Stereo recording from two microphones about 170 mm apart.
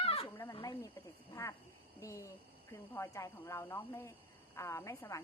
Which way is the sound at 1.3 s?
20° left (ahead or behind).